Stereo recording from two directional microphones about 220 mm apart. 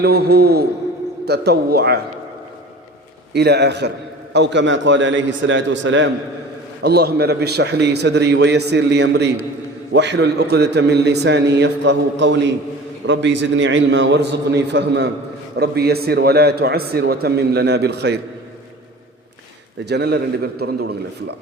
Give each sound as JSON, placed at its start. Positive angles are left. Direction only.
{"t": 0.0, "sound": "a man's voice", "side_deg": -45}
{"t": 3.3, "sound": "a man's voice", "side_deg": -50}
{"t": 19.8, "sound": "a man's voice", "side_deg": -50}